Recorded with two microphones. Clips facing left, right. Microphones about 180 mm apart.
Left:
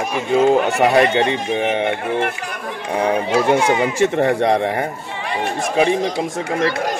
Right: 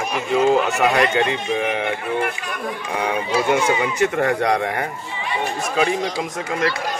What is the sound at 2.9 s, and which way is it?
Speech, 35° left (ahead or behind).